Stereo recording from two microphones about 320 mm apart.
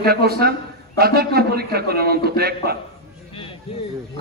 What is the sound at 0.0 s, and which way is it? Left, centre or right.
A man's voice, right.